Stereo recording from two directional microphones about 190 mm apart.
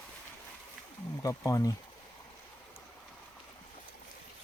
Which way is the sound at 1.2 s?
15° left (ahead or behind).